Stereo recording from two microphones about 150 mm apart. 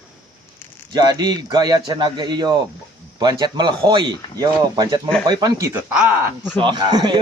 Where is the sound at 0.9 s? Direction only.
30° right (ahead or behind); by 6.5 s 10° right (ahead or behind).